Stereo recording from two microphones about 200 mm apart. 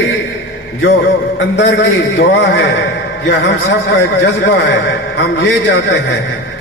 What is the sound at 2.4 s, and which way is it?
A man's voice, 60° left (ahead or behind).